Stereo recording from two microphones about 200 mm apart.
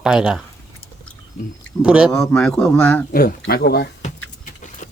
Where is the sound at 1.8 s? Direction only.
5° right (ahead or behind).